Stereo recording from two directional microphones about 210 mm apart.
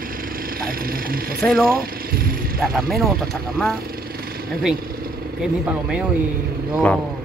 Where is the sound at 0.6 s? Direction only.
45° right (ahead or behind).